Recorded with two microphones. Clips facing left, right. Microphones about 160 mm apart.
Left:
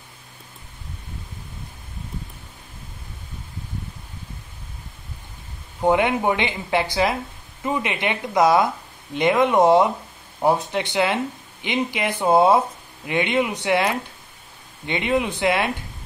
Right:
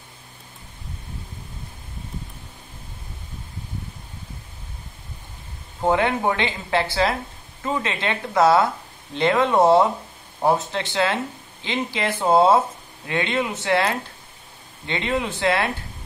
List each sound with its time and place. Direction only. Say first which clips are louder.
5.8 s speech: left 1 dB; 15° left (ahead or behind)